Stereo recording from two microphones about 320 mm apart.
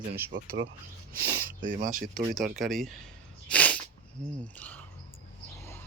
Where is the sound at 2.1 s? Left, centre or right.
Centre.